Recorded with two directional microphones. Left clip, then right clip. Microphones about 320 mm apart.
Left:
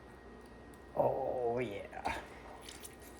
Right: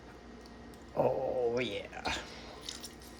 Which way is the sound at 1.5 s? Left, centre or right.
Centre.